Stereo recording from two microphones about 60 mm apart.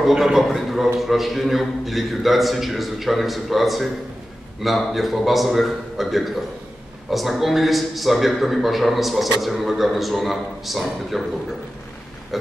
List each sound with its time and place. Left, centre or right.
0.0 s a man's voice: centre